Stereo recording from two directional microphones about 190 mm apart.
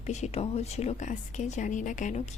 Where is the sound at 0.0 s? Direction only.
35° left (ahead or behind).